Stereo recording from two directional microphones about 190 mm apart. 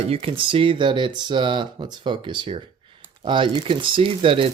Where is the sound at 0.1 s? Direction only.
30° right (ahead or behind).